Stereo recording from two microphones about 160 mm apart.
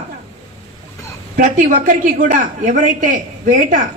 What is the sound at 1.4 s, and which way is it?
A woman's voice, 55° right (ahead or behind).